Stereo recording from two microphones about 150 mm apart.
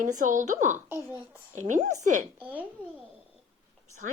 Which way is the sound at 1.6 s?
55° right (ahead or behind).